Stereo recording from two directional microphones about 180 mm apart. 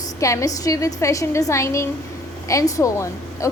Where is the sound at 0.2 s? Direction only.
15° left (ahead or behind).